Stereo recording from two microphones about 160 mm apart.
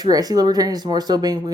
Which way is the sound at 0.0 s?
25° right (ahead or behind).